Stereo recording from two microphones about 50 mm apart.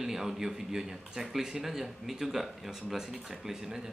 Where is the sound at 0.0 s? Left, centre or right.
Centre.